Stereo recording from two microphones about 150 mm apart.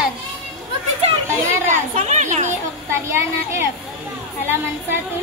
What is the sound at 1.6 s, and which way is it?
Speech, 50° right (ahead or behind).